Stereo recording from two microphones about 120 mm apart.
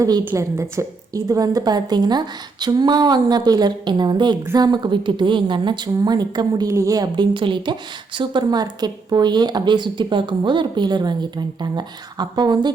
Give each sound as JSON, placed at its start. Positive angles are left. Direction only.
{"t": 0.3, "sound": "a woman's voice", "side_deg": -25}